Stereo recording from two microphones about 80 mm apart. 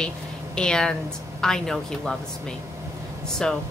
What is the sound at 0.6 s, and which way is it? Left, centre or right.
A woman's voice, centre.